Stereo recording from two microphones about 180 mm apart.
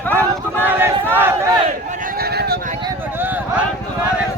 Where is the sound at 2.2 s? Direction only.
60° right (ahead or behind).